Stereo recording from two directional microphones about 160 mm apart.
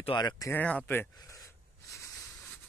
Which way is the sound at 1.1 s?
20° left (ahead or behind).